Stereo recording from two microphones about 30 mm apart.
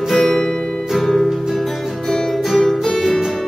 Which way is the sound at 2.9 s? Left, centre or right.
Centre.